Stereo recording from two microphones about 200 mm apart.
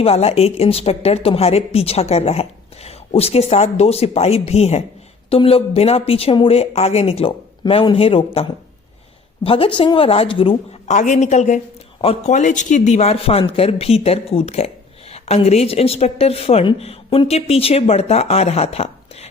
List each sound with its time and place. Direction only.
0.0 s a woman's voice: 30° left (ahead or behind)